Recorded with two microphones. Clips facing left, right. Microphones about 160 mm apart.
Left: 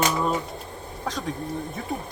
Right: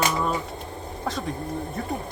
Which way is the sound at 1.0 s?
5° right (ahead or behind).